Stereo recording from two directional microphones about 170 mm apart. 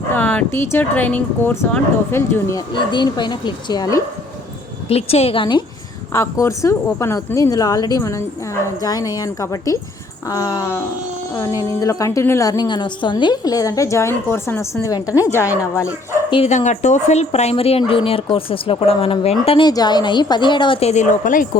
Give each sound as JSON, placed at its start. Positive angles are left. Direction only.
{"t": 0.1, "sound": "speech", "side_deg": 10}
{"t": 2.7, "sound": "a woman's voice", "side_deg": 25}
{"t": 4.9, "sound": "speech", "side_deg": 35}
{"t": 6.1, "sound": "a woman's voice", "side_deg": 20}
{"t": 16.3, "sound": "speech", "side_deg": 40}